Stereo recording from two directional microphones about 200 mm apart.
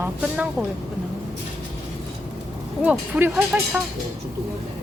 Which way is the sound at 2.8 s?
10° right (ahead or behind).